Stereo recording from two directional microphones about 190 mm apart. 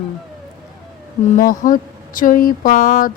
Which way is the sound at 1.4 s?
45° left (ahead or behind).